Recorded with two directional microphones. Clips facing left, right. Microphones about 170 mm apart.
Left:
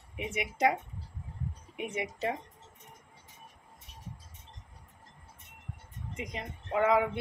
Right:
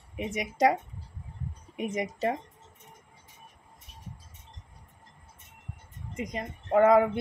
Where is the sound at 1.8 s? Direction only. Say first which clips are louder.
Right 5 dB; 40° right (ahead or behind).